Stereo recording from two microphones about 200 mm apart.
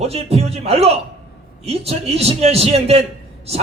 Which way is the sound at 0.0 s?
30° right (ahead or behind).